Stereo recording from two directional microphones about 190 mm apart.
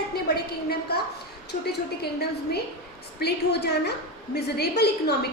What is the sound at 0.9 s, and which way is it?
Speech, 60° left (ahead or behind).